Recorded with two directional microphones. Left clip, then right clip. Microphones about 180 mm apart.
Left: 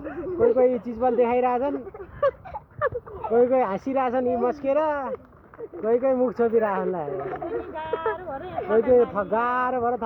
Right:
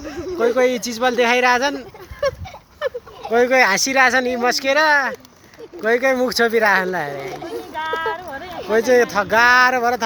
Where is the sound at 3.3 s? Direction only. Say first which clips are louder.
Right 4 dB; 40° right (ahead or behind).